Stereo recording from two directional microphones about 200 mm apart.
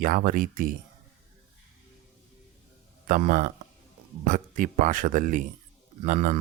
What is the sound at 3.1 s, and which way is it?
Speech, 40° right (ahead or behind).